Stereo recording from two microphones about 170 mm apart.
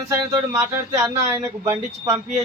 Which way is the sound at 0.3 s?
15° right (ahead or behind).